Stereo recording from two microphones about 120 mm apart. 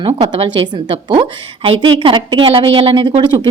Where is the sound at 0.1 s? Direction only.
55° right (ahead or behind).